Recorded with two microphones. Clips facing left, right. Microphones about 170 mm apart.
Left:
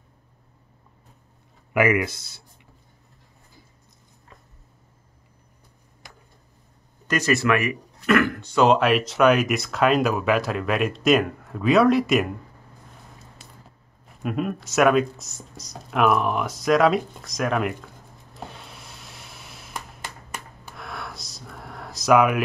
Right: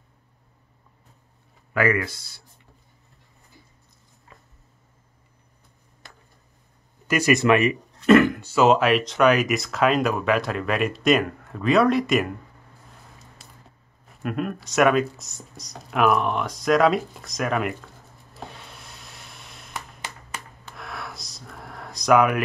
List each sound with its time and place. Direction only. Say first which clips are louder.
1.7 s speech: left 2 dB; 15° left (ahead or behind)
7.1 s speech: right 3 dB; 10° right (ahead or behind)
8.4 s speech: even; 5° right (ahead or behind)
14.2 s speech: left 1 dB; centre (ahead or behind)
18.3 s a sound: left 1 dB; centre (ahead or behind)
20.7 s a sound: even; centre (ahead or behind)